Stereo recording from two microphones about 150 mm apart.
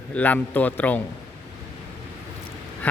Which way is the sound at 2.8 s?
10° left (ahead or behind).